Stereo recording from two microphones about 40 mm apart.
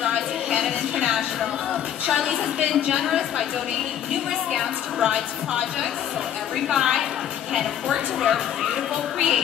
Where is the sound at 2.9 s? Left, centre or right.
Centre.